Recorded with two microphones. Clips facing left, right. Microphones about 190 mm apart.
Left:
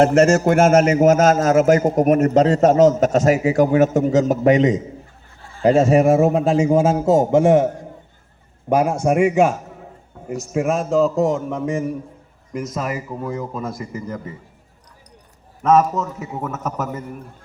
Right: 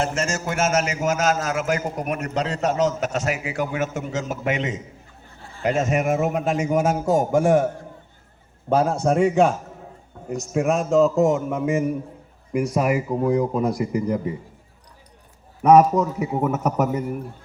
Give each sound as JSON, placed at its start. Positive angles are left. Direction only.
{"t": 0.0, "sound": "a man's voice", "side_deg": 60}
{"t": 10.2, "sound": "a sound", "side_deg": 5}
{"t": 10.5, "sound": "a man's voice", "side_deg": 5}
{"t": 15.6, "sound": "speech", "side_deg": -15}